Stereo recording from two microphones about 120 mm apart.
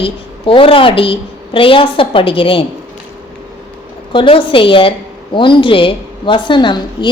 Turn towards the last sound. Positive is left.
turn(degrees=40)  # may be behind; listen again after turning